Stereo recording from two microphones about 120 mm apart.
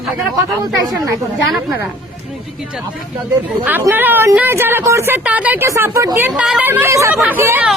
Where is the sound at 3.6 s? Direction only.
15° right (ahead or behind).